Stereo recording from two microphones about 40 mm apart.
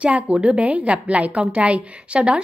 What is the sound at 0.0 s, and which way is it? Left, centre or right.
A woman's voice, right.